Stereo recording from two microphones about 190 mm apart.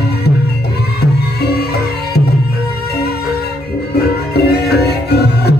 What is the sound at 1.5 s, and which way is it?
Music, 55° left (ahead or behind).